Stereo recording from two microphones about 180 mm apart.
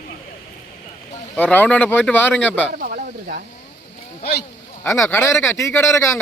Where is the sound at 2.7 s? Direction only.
55° right (ahead or behind).